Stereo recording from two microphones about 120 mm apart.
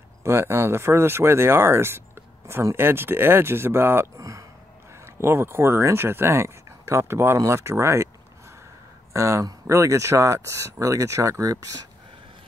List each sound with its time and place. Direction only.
0.2 s speech: 20° right (ahead or behind)
9.1 s speech: 25° right (ahead or behind)